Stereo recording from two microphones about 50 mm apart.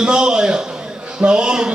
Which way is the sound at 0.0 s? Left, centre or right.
Centre.